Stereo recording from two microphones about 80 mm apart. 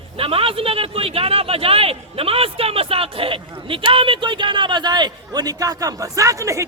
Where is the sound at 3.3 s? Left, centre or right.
Right.